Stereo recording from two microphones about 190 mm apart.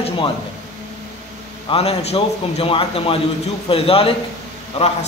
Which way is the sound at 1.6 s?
30° left (ahead or behind).